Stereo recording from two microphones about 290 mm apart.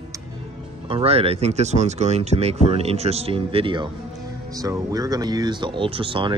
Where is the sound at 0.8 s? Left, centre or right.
Centre.